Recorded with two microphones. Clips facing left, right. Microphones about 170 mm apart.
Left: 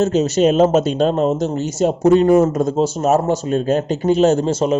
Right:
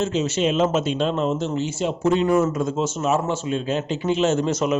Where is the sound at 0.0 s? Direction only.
40° left (ahead or behind).